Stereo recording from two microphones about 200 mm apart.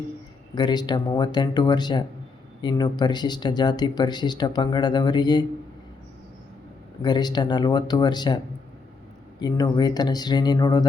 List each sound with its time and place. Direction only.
0.5 s speech: 20° left (ahead or behind)
7.0 s speech: 20° left (ahead or behind)
9.4 s speech: 20° left (ahead or behind)